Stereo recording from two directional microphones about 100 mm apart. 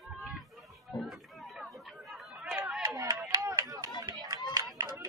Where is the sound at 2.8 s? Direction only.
35° right (ahead or behind).